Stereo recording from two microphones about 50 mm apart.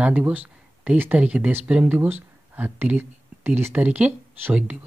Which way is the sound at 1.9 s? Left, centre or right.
Right.